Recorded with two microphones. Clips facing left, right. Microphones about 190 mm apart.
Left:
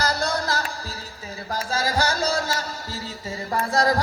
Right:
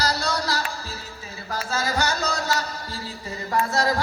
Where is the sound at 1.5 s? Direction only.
35° left (ahead or behind).